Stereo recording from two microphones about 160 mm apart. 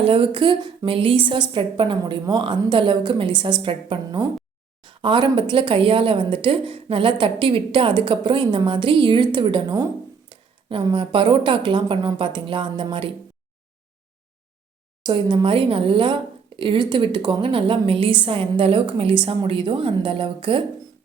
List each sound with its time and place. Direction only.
0.0 s a woman's voice: 35° right (ahead or behind)
15.0 s a woman's voice: 30° right (ahead or behind)